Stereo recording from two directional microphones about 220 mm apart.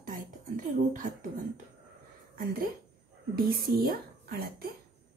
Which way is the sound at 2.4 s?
45° right (ahead or behind).